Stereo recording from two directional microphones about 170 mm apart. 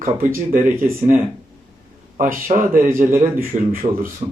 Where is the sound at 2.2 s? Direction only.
50° right (ahead or behind).